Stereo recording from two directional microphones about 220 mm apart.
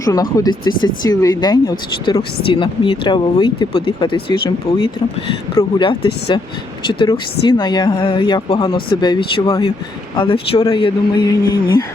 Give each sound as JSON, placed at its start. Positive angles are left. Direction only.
{"t": 0.0, "sound": "speech", "side_deg": 15}